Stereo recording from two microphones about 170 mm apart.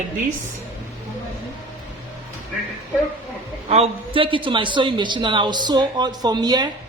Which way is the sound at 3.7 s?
35° right (ahead or behind).